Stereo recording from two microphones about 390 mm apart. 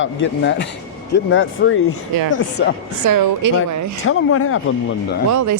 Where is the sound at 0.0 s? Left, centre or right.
Left.